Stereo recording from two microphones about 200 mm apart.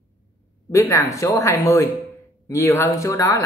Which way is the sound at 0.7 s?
15° left (ahead or behind).